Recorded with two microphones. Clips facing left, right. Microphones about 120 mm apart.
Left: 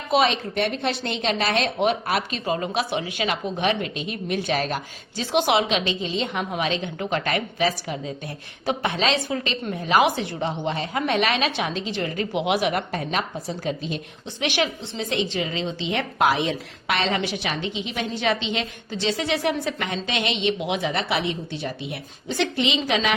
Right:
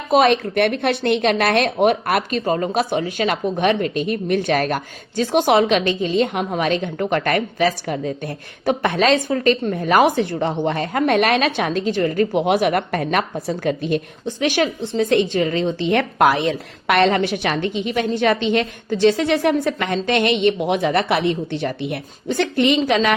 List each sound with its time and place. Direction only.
0.1 s a woman's voice: 50° right (ahead or behind)
14.4 s a woman's voice: 40° right (ahead or behind)